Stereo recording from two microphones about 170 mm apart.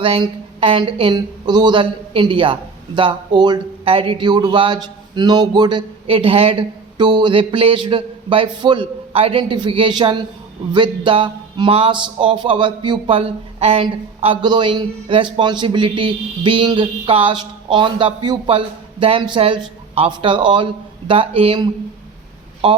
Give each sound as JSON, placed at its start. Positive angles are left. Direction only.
{"t": 0.0, "sound": "a woman's voice", "side_deg": -35}